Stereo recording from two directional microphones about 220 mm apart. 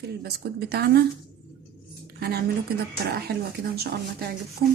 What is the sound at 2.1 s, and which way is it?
Speech, 45° right (ahead or behind).